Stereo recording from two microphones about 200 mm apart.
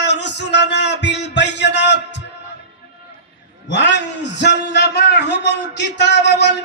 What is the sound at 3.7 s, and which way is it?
A man's voice, 60° left (ahead or behind).